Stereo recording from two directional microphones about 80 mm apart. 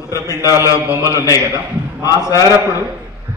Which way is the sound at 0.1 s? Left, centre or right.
Left.